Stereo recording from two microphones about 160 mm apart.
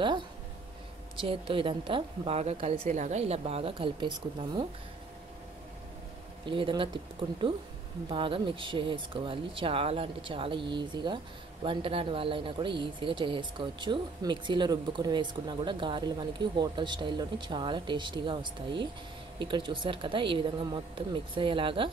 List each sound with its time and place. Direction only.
1.1 s a woman's voice: 35° right (ahead or behind)
6.4 s a woman's voice: 30° right (ahead or behind)